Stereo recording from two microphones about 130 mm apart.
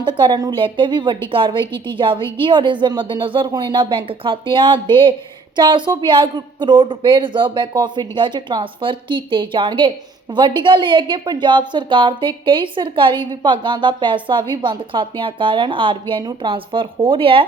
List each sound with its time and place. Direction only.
0.0 s a woman's voice: 40° right (ahead or behind)